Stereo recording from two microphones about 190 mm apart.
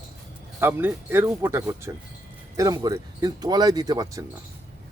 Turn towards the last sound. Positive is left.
turn(degrees=-20)  # may be behind; listen again after turning